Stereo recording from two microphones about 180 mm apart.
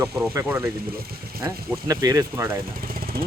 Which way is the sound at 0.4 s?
10° right (ahead or behind).